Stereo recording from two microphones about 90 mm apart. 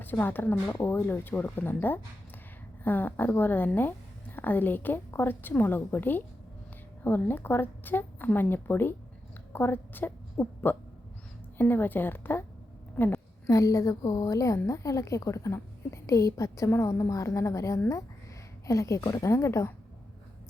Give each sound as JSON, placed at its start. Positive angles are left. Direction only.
{"t": 0.0, "sound": "a woman's voice", "side_deg": 20}
{"t": 13.5, "sound": "a woman's voice", "side_deg": 40}